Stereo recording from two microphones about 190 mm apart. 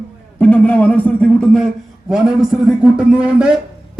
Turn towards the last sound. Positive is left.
turn(degrees=-5)  # may be behind; listen again after turning